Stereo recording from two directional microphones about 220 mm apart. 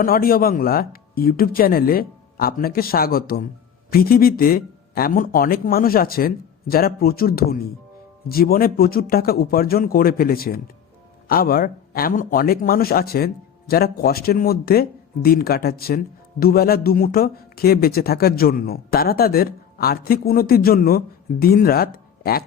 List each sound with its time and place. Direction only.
0.0 s a man's voice: 40° left (ahead or behind)